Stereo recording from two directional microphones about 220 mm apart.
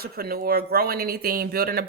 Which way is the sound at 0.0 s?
45° right (ahead or behind).